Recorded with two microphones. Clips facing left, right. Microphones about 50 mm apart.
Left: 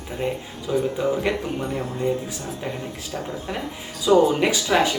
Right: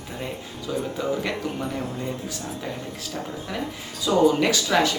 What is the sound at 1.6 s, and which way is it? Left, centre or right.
Speech, centre.